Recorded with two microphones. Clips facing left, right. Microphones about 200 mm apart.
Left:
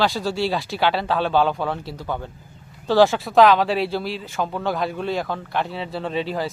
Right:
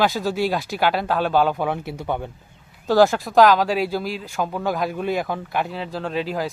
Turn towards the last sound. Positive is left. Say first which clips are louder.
# even
turn(degrees=0)  # may be behind; listen again after turning